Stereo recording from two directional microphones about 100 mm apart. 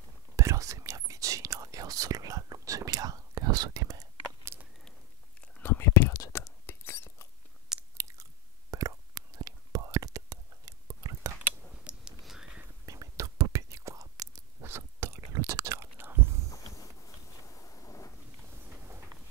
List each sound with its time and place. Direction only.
0.4 s whispering: 30° right (ahead or behind)
5.6 s whispering: 25° left (ahead or behind)
8.0 s chewing: 35° right (ahead or behind)
11.7 s whispering: 10° right (ahead or behind)
12.8 s whispering: 35° right (ahead or behind)
16.5 s a sound: 35° left (ahead or behind)
18.9 s train: 25° right (ahead or behind)